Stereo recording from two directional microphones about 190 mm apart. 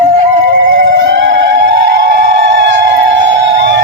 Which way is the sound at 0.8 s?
70° right (ahead or behind).